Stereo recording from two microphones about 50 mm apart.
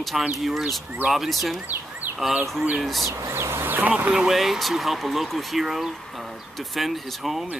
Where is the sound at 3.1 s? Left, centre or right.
Right.